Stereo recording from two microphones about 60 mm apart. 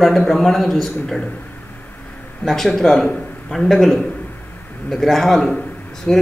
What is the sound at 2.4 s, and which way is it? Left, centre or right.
A man's voice, centre.